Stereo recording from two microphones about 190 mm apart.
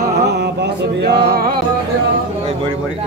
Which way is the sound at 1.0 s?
55° right (ahead or behind).